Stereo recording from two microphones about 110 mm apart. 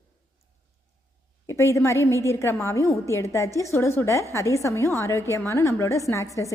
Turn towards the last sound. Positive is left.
turn(degrees=30)  # may be behind; listen again after turning